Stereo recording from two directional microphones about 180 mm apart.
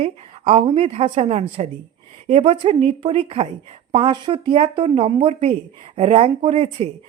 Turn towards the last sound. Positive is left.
turn(degrees=-35)  # may be behind; listen again after turning